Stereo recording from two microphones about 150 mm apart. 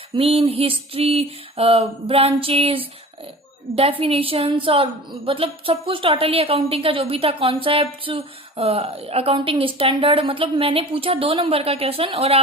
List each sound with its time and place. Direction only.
0.1 s a woman's voice: 40° right (ahead or behind)